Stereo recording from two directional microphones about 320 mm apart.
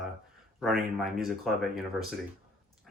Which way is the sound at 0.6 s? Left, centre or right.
Centre.